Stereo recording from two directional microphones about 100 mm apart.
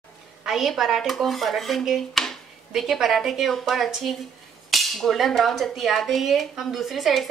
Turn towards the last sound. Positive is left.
turn(degrees=0)  # may be behind; listen again after turning